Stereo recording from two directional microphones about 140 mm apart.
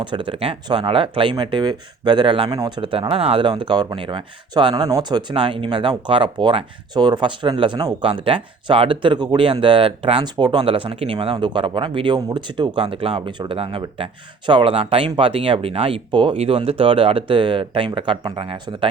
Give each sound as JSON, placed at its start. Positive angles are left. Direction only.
{"t": 0.0, "sound": "speech", "side_deg": -35}
{"t": 3.5, "sound": "speech", "side_deg": -30}